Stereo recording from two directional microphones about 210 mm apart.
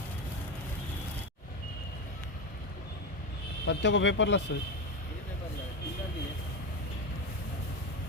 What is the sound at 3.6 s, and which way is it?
Speech, 60° left (ahead or behind).